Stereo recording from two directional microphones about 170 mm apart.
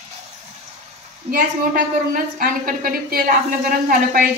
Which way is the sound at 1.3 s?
55° right (ahead or behind).